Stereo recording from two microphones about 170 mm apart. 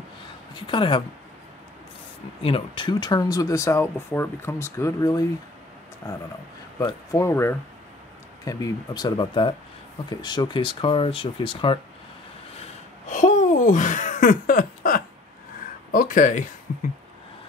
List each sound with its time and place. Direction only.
0.6 s speech: 30° left (ahead or behind)
2.4 s speech: 30° left (ahead or behind)
6.8 s speech: 20° left (ahead or behind)
13.1 s a sound: 45° left (ahead or behind)
15.9 s speech: 55° left (ahead or behind)
16.7 s a sound: 50° left (ahead or behind)